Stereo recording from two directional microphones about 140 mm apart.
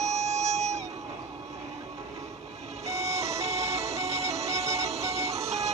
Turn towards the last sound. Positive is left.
turn(degrees=-50)  # may be behind; listen again after turning